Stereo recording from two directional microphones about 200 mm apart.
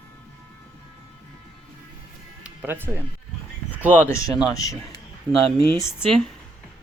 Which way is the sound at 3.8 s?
10° right (ahead or behind).